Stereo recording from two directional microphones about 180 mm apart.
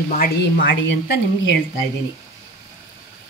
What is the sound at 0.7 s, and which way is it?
Speech, 90° left.